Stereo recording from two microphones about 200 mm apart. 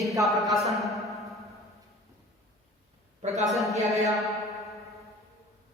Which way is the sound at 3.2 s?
35° right (ahead or behind).